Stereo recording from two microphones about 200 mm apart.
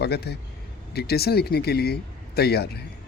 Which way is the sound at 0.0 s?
55° left (ahead or behind).